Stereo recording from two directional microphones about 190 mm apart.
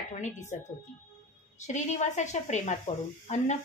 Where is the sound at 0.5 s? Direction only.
40° left (ahead or behind).